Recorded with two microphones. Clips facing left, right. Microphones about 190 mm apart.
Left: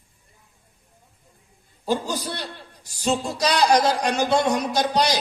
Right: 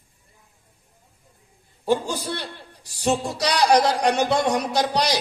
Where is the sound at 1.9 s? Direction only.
55° right (ahead or behind).